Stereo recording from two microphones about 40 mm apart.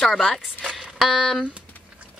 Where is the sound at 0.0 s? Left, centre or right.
Centre.